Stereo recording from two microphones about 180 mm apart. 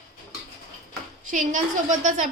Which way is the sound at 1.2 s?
45° right (ahead or behind).